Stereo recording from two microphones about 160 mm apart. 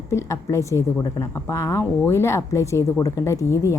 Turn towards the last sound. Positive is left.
turn(degrees=20)  # may be behind; listen again after turning